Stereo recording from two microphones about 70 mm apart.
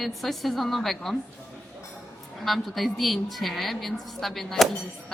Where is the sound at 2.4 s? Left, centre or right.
Centre.